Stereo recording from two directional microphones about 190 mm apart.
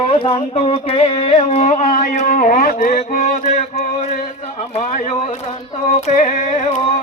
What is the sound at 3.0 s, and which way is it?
Speech, 35° left (ahead or behind).